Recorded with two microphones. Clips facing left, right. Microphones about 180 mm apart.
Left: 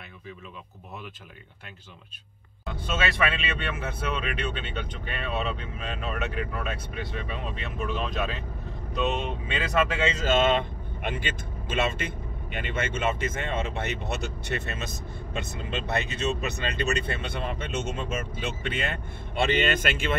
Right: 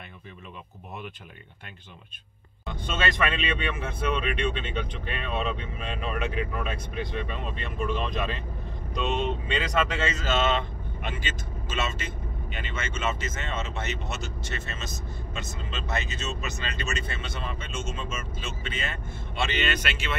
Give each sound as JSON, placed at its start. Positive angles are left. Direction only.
{"t": 2.6, "sound": "speech", "side_deg": 5}
{"t": 10.2, "sound": "speech", "side_deg": 50}